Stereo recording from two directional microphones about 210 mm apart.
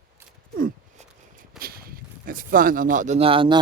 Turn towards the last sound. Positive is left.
turn(degrees=-25)  # may be behind; listen again after turning